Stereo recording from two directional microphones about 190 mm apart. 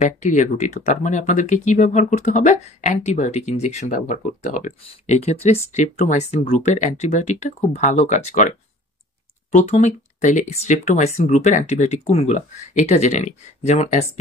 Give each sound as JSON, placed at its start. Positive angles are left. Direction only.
{"t": 0.0, "sound": "speech", "side_deg": 35}